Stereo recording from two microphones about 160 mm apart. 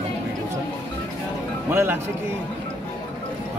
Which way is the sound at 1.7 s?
15° right (ahead or behind).